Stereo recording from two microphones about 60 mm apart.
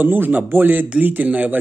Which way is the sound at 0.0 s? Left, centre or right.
Right.